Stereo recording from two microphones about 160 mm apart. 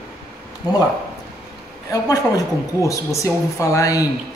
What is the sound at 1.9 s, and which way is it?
A woman's voice, 20° left (ahead or behind).